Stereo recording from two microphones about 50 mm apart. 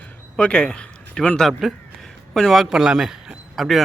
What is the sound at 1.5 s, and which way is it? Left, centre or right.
A man's voice, centre.